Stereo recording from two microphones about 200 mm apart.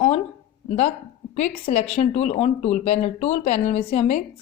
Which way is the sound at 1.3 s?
35° left (ahead or behind).